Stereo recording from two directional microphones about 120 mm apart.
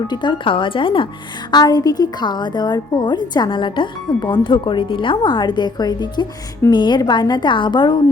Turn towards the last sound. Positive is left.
turn(degrees=40)  # may be behind; listen again after turning